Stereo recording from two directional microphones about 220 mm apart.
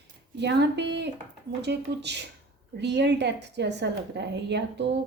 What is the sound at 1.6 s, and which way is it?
A woman's voice, 50° right (ahead or behind).